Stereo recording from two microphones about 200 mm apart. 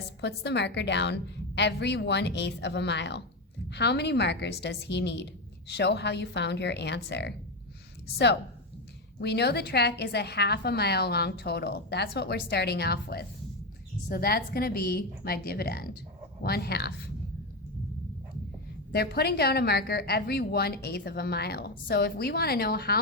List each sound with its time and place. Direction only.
0.2 s a woman's voice: 55° left (ahead or behind)
9.2 s a woman's voice: 55° left (ahead or behind)
18.9 s a woman's voice: 50° left (ahead or behind)